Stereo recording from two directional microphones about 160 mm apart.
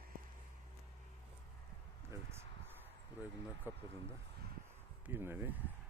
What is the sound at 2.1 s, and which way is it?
Speech, 20° right (ahead or behind).